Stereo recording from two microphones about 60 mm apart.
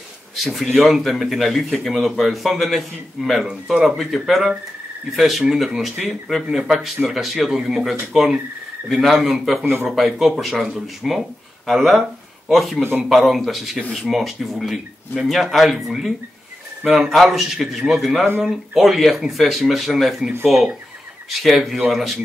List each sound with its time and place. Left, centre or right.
0.4 s speech: centre
16.9 s speech: centre